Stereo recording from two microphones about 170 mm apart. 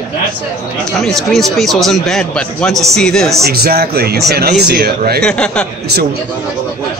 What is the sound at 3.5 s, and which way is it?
Speech, 65° right (ahead or behind).